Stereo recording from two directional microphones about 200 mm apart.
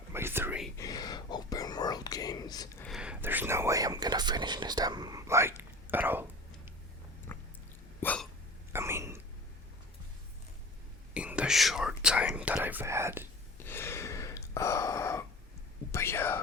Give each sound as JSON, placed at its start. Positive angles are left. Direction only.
{"t": 0.1, "sound": "whispering", "side_deg": -10}
{"t": 0.8, "sound": "whispering", "side_deg": 20}
{"t": 2.8, "sound": "whispering", "side_deg": -5}
{"t": 7.3, "sound": "a sound", "side_deg": 10}
{"t": 8.0, "sound": "hiccup", "side_deg": 5}
{"t": 8.7, "sound": "whispering", "side_deg": -15}
{"t": 11.1, "sound": "whispering", "side_deg": -5}
{"t": 13.7, "sound": "gasp", "side_deg": 10}
{"t": 15.9, "sound": "whispering", "side_deg": 15}